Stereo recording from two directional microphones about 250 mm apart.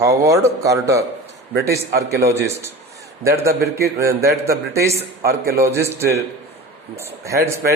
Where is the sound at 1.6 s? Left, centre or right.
Right.